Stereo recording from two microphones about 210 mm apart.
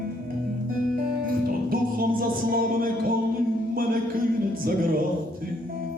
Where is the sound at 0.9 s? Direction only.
45° right (ahead or behind).